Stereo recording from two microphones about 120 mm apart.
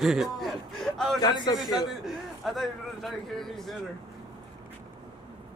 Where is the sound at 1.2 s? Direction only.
35° left (ahead or behind).